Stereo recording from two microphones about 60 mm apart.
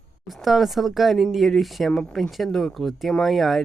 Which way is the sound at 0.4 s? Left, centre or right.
Centre.